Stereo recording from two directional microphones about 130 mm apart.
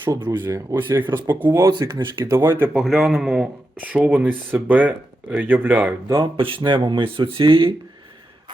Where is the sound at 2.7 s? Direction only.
Centre (ahead or behind).